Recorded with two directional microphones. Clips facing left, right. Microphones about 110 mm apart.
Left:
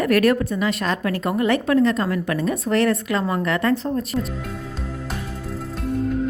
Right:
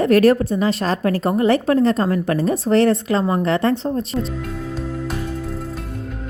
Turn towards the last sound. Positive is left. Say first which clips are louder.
# left 9 dB
turn(degrees=0)  # may be behind; listen again after turning